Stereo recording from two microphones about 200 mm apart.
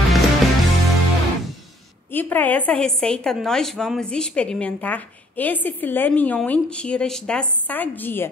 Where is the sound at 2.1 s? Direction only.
10° left (ahead or behind).